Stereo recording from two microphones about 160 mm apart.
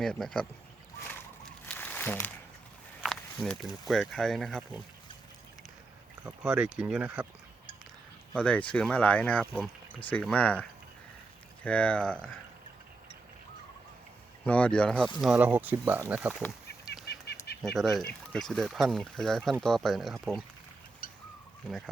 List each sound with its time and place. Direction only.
0.0 s speech: 5° left (ahead or behind)
1.6 s crumpling: 10° left (ahead or behind)
3.0 s speech: centre (ahead or behind)
6.2 s speech: 5° right (ahead or behind)
8.3 s speech: 5° left (ahead or behind)
14.4 s speech: 10° left (ahead or behind)
15.2 s speech: 5° right (ahead or behind)
16.9 s bird flight: 90° left
17.7 s speech: centre (ahead or behind)
21.0 s a sound: 70° left (ahead or behind)